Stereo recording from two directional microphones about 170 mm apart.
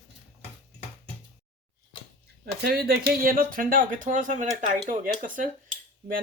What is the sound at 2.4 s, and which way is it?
Speech, 65° right (ahead or behind).